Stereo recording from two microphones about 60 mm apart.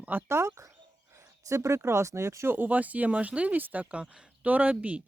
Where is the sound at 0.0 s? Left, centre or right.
Right.